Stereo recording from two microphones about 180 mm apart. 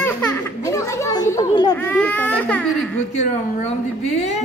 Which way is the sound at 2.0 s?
5° left (ahead or behind).